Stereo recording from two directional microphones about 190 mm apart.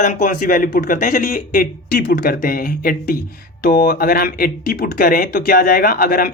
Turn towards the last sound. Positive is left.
turn(degrees=50)  # may be behind; listen again after turning